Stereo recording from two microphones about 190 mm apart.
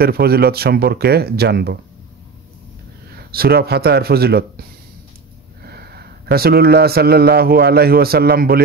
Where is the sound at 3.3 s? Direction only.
55° right (ahead or behind).